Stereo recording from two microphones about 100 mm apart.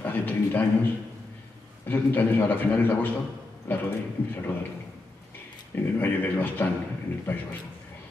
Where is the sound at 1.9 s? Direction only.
20° left (ahead or behind).